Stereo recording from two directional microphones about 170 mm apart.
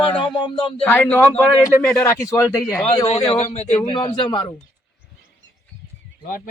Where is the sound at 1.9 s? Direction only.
20° left (ahead or behind).